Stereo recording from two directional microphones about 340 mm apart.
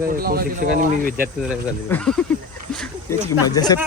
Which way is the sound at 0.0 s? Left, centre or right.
Right.